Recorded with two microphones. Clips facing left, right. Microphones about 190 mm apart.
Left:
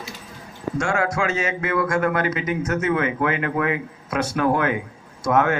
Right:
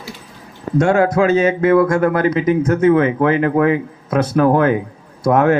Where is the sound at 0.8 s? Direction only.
35° right (ahead or behind).